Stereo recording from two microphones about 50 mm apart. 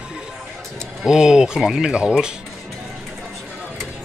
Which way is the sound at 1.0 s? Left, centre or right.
Centre.